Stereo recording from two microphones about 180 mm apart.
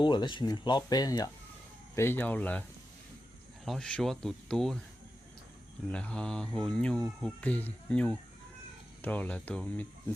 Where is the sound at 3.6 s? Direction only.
5° left (ahead or behind).